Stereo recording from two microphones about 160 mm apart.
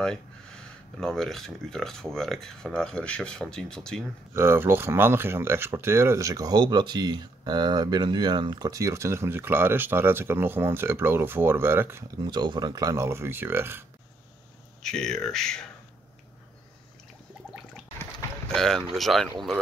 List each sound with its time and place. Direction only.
1.0 s speech: 5° left (ahead or behind)
4.3 s speech: 15° right (ahead or behind)
12.3 s speech: 25° right (ahead or behind)
14.8 s speech: 5° left (ahead or behind)
18.5 s speech: 5° left (ahead or behind)